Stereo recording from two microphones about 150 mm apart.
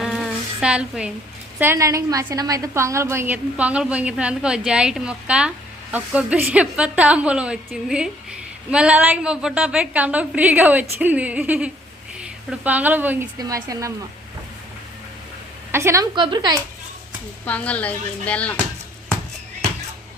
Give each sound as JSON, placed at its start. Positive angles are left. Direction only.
{"t": 0.0, "sound": "a sound", "side_deg": 0}
{"t": 1.5, "sound": "a woman's voice", "side_deg": -15}
{"t": 13.4, "sound": "speech", "side_deg": -25}
{"t": 15.7, "sound": "speech", "side_deg": -20}
{"t": 16.1, "sound": "speech", "side_deg": -30}
{"t": 17.4, "sound": "speech", "side_deg": 10}